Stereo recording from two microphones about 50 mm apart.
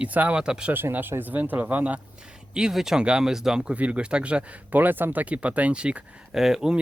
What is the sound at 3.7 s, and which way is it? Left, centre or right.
Speech, right.